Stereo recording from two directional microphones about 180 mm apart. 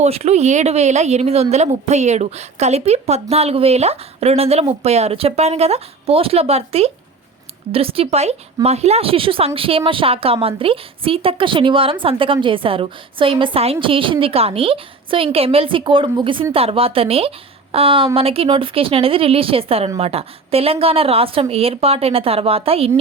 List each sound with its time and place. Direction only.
0.0 s a woman's voice: 35° right (ahead or behind)